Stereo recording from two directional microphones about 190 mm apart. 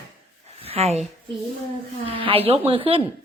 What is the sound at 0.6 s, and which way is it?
Speech, 30° right (ahead or behind).